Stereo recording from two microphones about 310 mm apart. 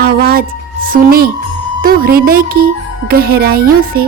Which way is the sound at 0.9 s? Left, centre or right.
Right.